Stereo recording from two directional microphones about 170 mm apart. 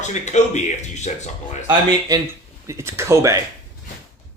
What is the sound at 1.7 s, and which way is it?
Speech, 25° right (ahead or behind).